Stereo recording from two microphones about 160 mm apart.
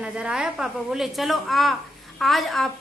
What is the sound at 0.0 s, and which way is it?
A woman's voice, 5° right (ahead or behind).